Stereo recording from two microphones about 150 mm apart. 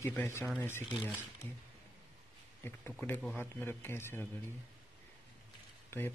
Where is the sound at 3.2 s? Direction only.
10° left (ahead or behind).